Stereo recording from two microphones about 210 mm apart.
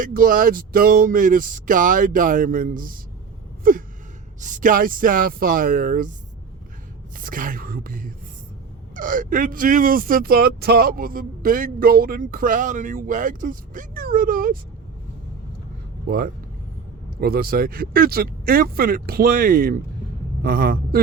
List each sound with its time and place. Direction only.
0.0 s speech: 40° right (ahead or behind)
3.6 s gasp: 40° right (ahead or behind)
4.4 s speech: 35° right (ahead or behind)
7.2 s speech: 40° right (ahead or behind)
16.0 s a man's voice: 45° right (ahead or behind)